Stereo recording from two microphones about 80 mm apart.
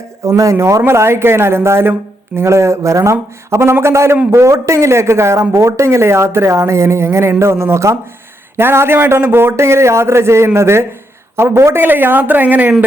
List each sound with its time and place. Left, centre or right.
0.3 s a man's voice: right